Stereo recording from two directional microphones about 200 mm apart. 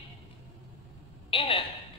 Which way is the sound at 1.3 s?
25° left (ahead or behind).